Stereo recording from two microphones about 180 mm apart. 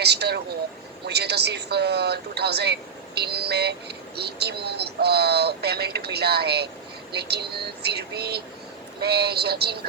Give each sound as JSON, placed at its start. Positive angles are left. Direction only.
{"t": 0.0, "sound": "speech", "side_deg": -65}